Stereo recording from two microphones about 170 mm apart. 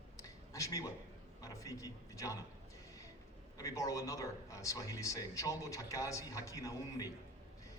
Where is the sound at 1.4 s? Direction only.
20° left (ahead or behind).